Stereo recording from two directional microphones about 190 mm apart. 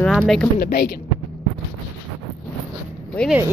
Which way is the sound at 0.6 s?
55° left (ahead or behind).